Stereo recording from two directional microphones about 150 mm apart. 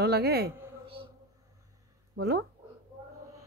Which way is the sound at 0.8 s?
35° right (ahead or behind).